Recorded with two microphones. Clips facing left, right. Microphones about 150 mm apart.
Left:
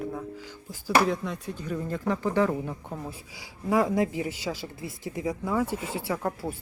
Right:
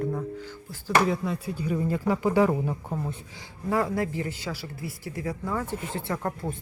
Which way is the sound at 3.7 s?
15° left (ahead or behind).